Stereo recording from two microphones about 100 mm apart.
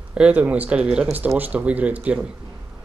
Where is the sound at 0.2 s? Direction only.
15° right (ahead or behind).